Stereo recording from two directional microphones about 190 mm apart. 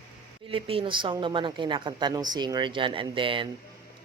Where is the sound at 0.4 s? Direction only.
30° right (ahead or behind).